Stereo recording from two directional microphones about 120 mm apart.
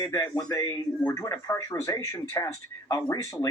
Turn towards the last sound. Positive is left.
turn(degrees=30)  # may be behind; listen again after turning